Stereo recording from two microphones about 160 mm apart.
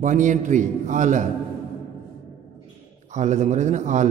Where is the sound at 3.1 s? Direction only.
50° right (ahead or behind).